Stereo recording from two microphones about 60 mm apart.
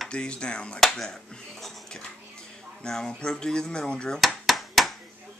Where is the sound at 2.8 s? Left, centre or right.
Centre.